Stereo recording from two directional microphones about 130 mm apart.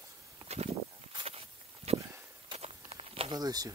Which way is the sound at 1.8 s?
25° right (ahead or behind).